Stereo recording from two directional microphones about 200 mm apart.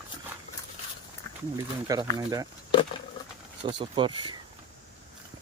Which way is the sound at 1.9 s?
15° right (ahead or behind).